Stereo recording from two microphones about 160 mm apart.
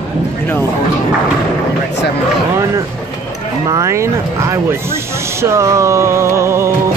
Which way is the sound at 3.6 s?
20° right (ahead or behind).